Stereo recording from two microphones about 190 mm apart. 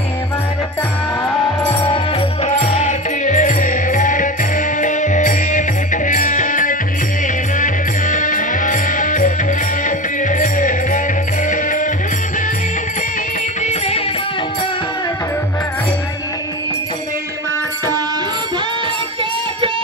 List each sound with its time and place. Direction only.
2.4 s music: 35° left (ahead or behind)
13.7 s music: 35° left (ahead or behind)